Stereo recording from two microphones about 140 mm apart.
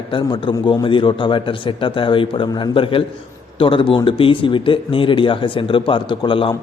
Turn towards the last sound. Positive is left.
turn(degrees=35)  # may be behind; listen again after turning